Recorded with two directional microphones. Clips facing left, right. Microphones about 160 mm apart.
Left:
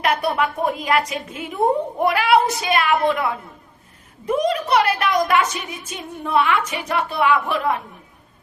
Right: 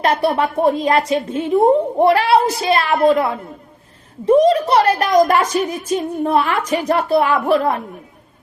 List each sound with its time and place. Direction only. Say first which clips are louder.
0.0 s a woman's voice: right 4 dB; 30° right (ahead or behind)